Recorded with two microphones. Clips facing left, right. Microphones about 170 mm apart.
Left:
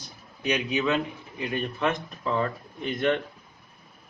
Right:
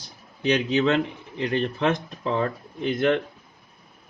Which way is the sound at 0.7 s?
70° right (ahead or behind).